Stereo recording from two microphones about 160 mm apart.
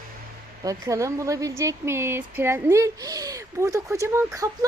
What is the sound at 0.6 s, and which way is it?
Speech, 20° right (ahead or behind).